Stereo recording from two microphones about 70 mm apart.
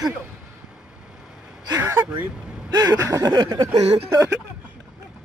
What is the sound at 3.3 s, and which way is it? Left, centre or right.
Throat clearing, right.